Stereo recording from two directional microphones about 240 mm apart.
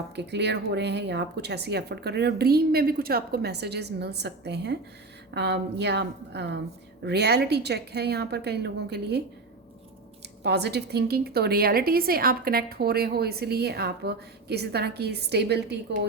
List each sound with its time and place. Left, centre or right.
0.2 s a woman's voice: right
10.4 s a woman's voice: right